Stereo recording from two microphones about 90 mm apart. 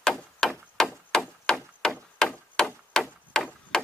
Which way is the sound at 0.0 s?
5° left (ahead or behind).